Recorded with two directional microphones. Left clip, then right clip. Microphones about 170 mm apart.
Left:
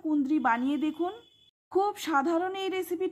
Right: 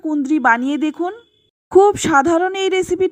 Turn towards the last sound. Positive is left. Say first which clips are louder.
# right 14 dB
turn(degrees=-35)  # may be behind; listen again after turning